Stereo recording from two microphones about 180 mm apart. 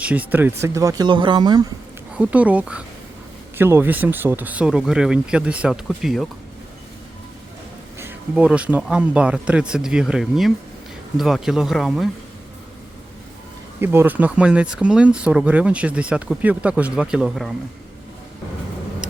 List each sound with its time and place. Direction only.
0.0 s speech: 10° right (ahead or behind); by 1.6 s 25° right (ahead or behind)
2.1 s speech: 10° right (ahead or behind)
7.9 s speech: 10° right (ahead or behind)
13.8 s speech: 10° right (ahead or behind)